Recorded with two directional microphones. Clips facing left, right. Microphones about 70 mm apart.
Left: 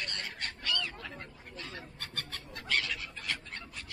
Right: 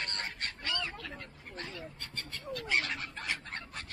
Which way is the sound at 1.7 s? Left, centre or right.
Left.